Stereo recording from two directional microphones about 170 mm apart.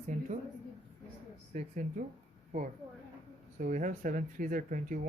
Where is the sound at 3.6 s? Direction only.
50° right (ahead or behind).